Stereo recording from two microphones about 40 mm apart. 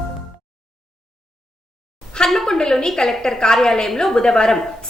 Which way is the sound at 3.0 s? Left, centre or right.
Centre.